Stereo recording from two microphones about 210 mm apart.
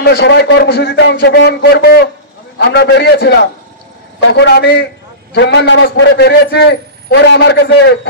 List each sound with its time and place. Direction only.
0.0 s a man's voice: 50° left (ahead or behind)